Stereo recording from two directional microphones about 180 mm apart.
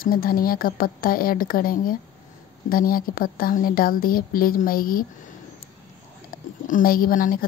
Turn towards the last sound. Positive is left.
turn(degrees=50)  # may be behind; listen again after turning